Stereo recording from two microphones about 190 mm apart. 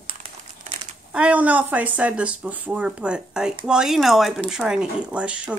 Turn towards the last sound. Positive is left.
turn(degrees=-5)  # may be behind; listen again after turning